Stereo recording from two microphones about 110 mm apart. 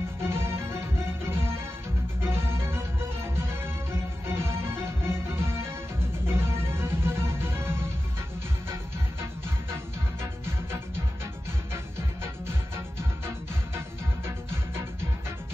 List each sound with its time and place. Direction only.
0.2 s music: 25° right (ahead or behind)
11.7 s music: 25° right (ahead or behind)